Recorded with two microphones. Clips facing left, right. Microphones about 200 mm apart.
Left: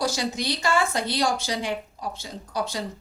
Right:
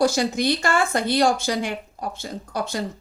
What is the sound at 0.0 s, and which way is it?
Speech, 50° right (ahead or behind).